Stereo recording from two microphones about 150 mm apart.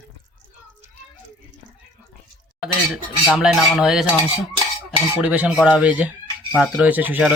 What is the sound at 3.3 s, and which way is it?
Speech, 5° right (ahead or behind).